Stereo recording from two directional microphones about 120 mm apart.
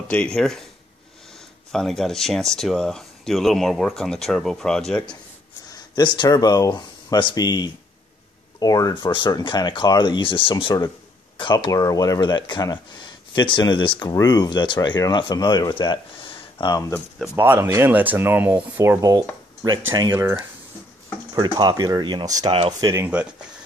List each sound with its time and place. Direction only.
0.1 s speech: 10° left (ahead or behind)
1.7 s speech: 5° left (ahead or behind)
5.7 s speech: 35° left (ahead or behind)
11.3 s a sound: 45° left (ahead or behind)
11.7 s speech: 30° left (ahead or behind); by 16.7 s 50° left (ahead or behind)
17.4 s speech: 20° right (ahead or behind)
22.5 s speech: 50° right (ahead or behind)
22.8 s speech: 30° right (ahead or behind)
23.0 s speech: 10° right (ahead or behind)